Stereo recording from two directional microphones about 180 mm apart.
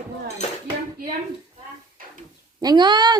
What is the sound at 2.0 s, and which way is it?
Dog, 50° right (ahead or behind).